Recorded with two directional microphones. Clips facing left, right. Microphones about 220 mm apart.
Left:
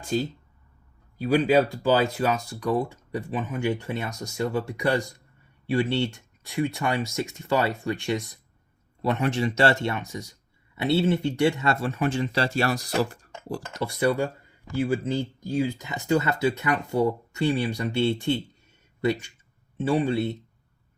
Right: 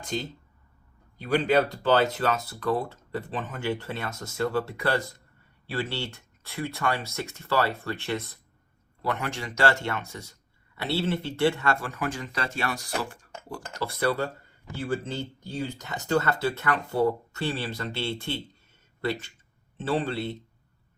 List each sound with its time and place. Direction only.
1.2 s speech: 10° left (ahead or behind); by 13.6 s 35° left (ahead or behind)
13.7 s speech: 15° left (ahead or behind)
19.7 s speech: 10° left (ahead or behind)